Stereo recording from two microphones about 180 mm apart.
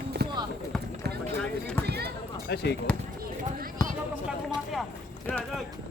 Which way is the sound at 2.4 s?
65° left (ahead or behind).